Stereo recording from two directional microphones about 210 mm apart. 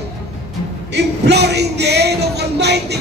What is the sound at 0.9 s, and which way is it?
Music, 55° right (ahead or behind).